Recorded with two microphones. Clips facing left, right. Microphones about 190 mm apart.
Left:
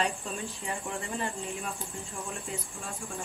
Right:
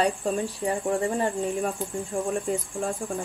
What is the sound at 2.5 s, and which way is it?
Speech, 45° right (ahead or behind).